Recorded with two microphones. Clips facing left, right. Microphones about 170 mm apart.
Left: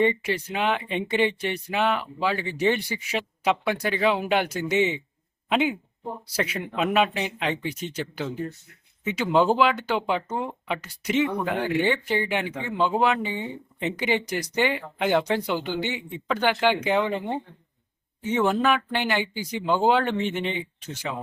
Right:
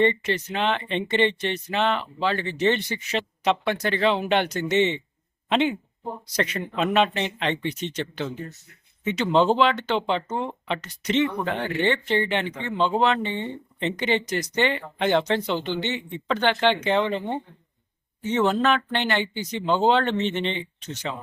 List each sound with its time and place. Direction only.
0.0 s speech: 10° left (ahead or behind)